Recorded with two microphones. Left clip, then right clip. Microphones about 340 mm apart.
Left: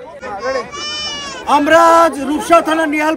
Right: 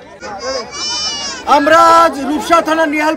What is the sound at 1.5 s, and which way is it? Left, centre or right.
A man's voice, centre.